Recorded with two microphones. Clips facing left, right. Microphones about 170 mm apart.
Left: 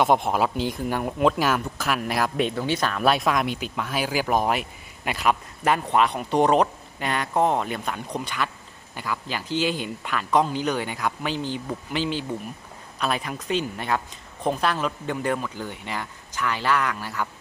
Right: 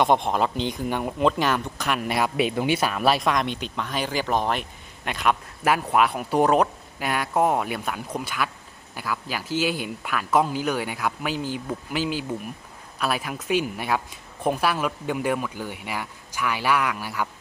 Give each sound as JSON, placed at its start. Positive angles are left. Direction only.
{"t": 0.0, "sound": "a woman's voice", "side_deg": 5}